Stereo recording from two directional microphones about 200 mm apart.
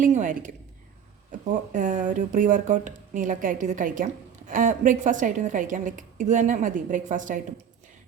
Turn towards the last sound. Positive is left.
turn(degrees=-40)  # may be behind; listen again after turning